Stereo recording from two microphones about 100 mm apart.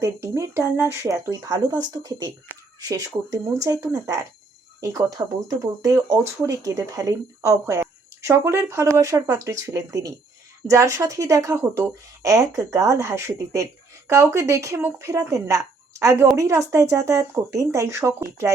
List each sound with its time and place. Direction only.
0.0 s a woman's voice: 30° right (ahead or behind)